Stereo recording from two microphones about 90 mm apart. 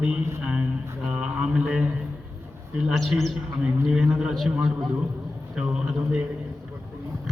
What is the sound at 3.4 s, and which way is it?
A man's voice, 10° right (ahead or behind).